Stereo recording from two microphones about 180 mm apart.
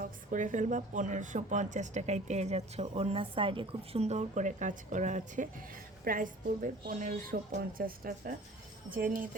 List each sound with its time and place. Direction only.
0.0 s a woman's voice: 45° right (ahead or behind)